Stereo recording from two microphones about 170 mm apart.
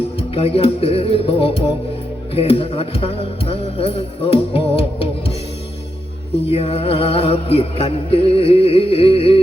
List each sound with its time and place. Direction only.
0.2 s music: 35° left (ahead or behind)
6.5 s music: 35° left (ahead or behind)